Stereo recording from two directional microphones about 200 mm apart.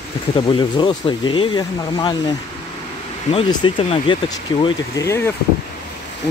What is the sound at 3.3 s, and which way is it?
Speech, 25° left (ahead or behind).